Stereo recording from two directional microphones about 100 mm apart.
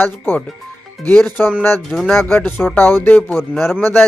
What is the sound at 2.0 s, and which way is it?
Speech, 5° left (ahead or behind).